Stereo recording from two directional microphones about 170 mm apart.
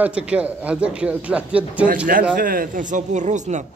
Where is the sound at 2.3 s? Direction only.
55° right (ahead or behind).